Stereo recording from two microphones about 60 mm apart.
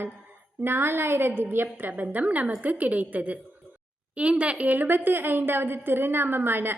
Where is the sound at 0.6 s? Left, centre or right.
Right.